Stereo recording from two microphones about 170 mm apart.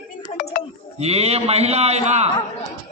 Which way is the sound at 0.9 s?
40° right (ahead or behind).